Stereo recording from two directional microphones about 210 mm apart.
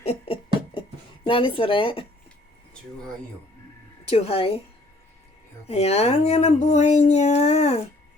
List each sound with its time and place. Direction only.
0.0 s music: 30° left (ahead or behind)
1.3 s speech: 25° left (ahead or behind)
4.0 s speech: 30° left (ahead or behind)
5.6 s speech: 30° left (ahead or behind)